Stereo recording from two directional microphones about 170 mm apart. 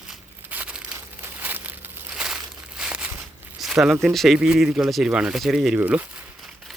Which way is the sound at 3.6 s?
Centre (ahead or behind).